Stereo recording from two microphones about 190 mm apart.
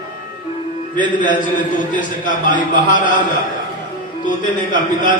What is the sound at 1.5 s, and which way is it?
A man's voice, 45° left (ahead or behind).